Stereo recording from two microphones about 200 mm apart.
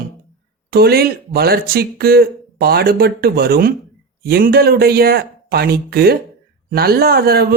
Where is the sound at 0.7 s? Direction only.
50° right (ahead or behind).